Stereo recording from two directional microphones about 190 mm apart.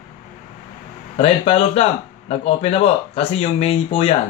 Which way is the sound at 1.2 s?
30° left (ahead or behind).